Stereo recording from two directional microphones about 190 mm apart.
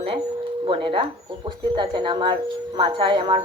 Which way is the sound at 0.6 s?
25° right (ahead or behind).